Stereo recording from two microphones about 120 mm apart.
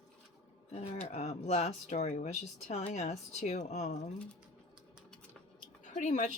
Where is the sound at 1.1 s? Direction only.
65° left (ahead or behind).